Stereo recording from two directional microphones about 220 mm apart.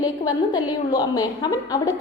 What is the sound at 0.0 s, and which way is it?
A woman's voice, 20° left (ahead or behind).